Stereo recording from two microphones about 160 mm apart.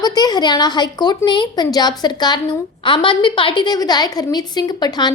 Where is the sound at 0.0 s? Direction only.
25° left (ahead or behind).